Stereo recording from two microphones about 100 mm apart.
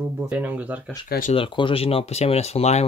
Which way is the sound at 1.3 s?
55° left (ahead or behind).